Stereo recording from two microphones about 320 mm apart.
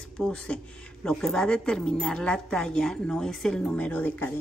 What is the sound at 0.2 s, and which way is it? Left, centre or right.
A woman's voice, centre.